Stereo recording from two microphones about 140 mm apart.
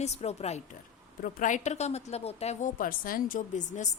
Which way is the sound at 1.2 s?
70° left (ahead or behind).